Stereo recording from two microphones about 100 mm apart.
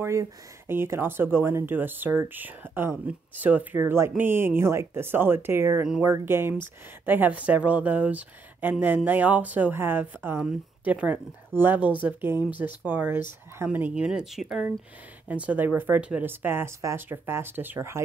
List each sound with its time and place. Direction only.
0.0 s speech: 30° right (ahead or behind); by 14.7 s 5° right (ahead or behind)
15.2 s speech: 15° right (ahead or behind)